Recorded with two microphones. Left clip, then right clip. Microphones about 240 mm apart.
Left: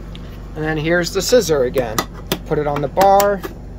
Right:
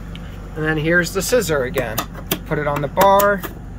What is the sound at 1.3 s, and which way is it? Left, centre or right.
Speech, left.